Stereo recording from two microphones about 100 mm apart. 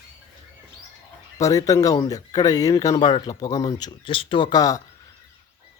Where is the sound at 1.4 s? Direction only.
35° left (ahead or behind).